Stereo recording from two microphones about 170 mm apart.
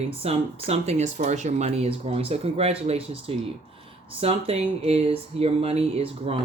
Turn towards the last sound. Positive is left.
turn(degrees=-35)  # may be behind; listen again after turning